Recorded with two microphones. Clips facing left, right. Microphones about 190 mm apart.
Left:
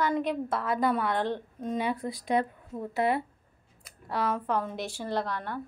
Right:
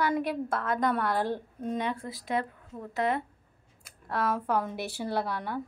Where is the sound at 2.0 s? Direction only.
20° left (ahead or behind).